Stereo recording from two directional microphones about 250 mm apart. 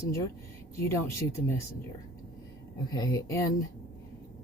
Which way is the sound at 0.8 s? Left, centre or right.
Centre.